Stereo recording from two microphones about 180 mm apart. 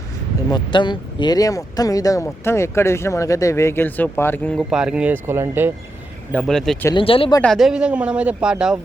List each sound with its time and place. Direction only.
0.5 s speech: 25° left (ahead or behind); by 4.6 s 10° left (ahead or behind)
4.7 s speech: 5° right (ahead or behind)
6.3 s speech: 5° left (ahead or behind)
6.9 s speech: 30° left (ahead or behind)
7.4 s speech: centre (ahead or behind)